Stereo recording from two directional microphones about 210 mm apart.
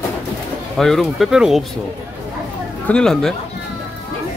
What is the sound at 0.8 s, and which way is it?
Speech, centre (ahead or behind).